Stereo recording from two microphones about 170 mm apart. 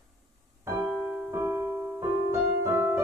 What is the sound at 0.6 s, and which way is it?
Piano, 15° right (ahead or behind).